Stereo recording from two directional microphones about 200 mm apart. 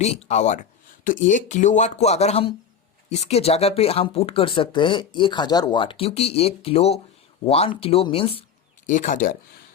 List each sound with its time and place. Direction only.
0.0 s speech: 35° left (ahead or behind)
8.9 s speech: 40° left (ahead or behind)